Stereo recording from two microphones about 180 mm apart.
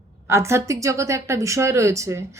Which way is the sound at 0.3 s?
15° right (ahead or behind).